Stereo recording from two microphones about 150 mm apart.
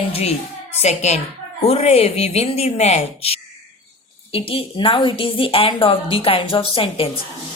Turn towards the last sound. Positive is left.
turn(degrees=35)  # may be behind; listen again after turning